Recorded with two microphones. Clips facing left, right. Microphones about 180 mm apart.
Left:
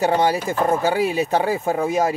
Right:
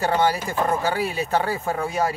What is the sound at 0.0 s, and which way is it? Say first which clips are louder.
Speech: left 3 dB; 20° left (ahead or behind).